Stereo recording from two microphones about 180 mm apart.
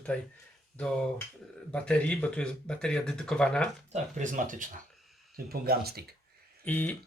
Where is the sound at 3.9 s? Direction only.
45° right (ahead or behind).